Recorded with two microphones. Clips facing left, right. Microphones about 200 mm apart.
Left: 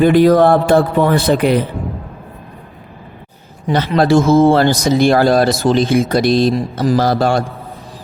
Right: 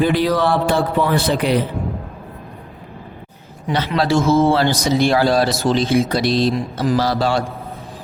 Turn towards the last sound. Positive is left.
turn(degrees=50)  # may be behind; listen again after turning